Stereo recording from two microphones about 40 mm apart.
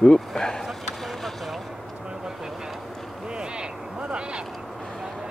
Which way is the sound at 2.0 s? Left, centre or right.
Centre.